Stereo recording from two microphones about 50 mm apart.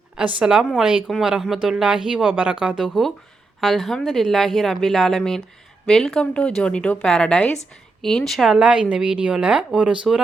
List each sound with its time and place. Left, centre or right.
0.2 s speech: centre
1.2 s speech: centre
3.6 s a woman's voice: centre
8.0 s a woman's voice: centre
8.4 s speech: centre